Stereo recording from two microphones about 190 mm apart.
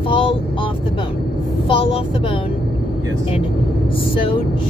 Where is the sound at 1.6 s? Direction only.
30° left (ahead or behind).